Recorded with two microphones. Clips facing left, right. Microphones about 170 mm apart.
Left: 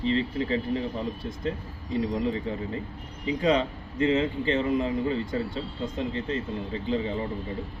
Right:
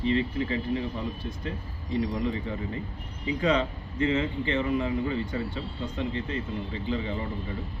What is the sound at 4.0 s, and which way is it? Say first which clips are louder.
Speech: left 2 dB; 35° left (ahead or behind).